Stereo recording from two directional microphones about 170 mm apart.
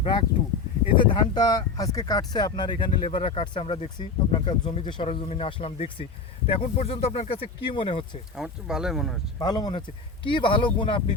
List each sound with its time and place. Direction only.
0.9 s speech: 25° left (ahead or behind)
8.4 s speech: 5° right (ahead or behind)
9.4 s speech: 25° left (ahead or behind)